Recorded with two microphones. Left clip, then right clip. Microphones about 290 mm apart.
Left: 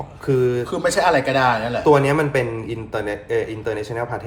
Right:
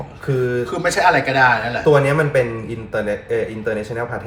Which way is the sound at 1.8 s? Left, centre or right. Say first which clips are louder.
Even; centre.